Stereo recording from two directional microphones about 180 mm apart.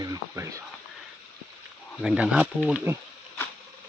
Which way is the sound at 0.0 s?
20° right (ahead or behind).